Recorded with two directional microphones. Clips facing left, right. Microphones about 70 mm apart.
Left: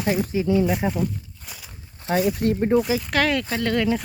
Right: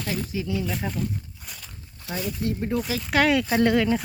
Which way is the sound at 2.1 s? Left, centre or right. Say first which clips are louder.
Left 8 dB; left.